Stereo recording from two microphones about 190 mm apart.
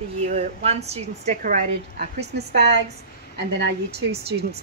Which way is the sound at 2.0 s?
60° right (ahead or behind).